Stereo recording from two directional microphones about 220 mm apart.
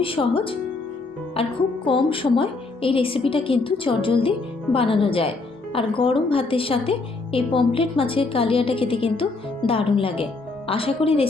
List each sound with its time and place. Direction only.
0.0 s a woman's voice: 25° left (ahead or behind)